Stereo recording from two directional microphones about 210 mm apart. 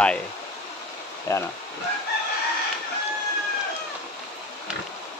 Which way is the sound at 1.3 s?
15° left (ahead or behind).